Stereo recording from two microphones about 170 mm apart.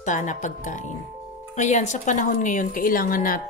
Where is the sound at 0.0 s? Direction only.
45° left (ahead or behind).